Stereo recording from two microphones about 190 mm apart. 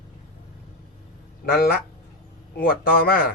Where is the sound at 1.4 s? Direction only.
55° left (ahead or behind).